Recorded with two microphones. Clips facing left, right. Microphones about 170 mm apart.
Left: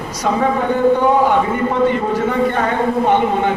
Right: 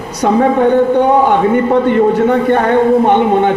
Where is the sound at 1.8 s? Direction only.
60° right (ahead or behind).